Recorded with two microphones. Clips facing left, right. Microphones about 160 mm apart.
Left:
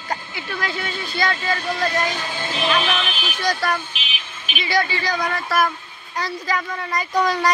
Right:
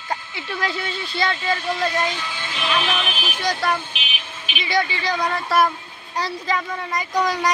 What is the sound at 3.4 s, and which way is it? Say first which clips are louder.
Speech: even; 20° right (ahead or behind).